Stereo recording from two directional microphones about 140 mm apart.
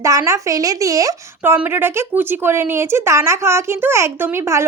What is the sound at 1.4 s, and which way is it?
A woman's voice, 15° right (ahead or behind).